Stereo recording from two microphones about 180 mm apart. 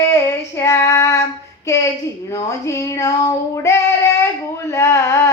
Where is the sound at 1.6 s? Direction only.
15° left (ahead or behind).